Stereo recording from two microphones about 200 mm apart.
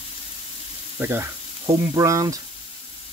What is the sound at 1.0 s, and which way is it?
Speech, 10° right (ahead or behind).